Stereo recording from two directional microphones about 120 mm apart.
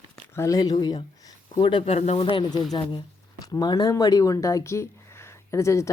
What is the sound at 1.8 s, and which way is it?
Speech, 65° left (ahead or behind).